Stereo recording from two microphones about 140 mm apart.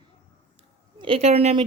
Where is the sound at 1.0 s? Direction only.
45° right (ahead or behind).